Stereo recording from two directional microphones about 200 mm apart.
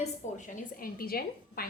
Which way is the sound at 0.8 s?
50° left (ahead or behind).